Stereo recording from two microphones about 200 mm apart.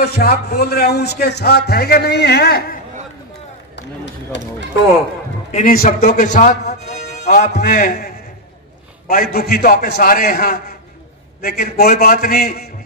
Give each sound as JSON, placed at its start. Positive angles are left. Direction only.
{"t": 0.0, "sound": "a man's voice", "side_deg": 50}
{"t": 3.7, "sound": "run", "side_deg": 60}
{"t": 5.5, "sound": "a man's voice", "side_deg": 40}